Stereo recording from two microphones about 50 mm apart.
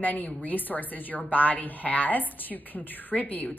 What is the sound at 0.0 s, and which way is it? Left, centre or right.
Speech, left.